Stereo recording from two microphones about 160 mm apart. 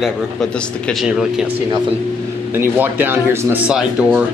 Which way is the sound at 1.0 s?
5° right (ahead or behind).